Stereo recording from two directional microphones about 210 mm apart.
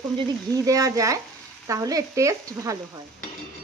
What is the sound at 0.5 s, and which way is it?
Speech, 15° right (ahead or behind).